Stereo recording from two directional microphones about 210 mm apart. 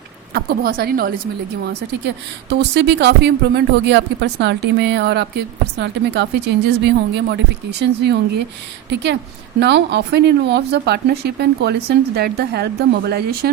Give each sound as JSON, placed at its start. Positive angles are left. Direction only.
{"t": 0.3, "sound": "a woman's voice", "side_deg": -45}